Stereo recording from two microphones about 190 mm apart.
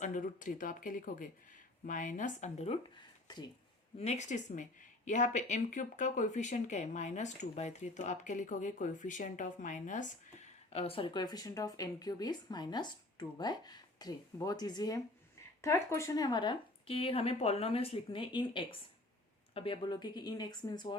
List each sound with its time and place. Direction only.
0.0 s speech: 45° left (ahead or behind)
3.2 s speech: 20° left (ahead or behind)
3.9 s speech: 35° left (ahead or behind)